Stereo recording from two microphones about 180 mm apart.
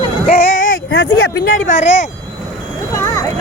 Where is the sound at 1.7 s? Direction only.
40° left (ahead or behind).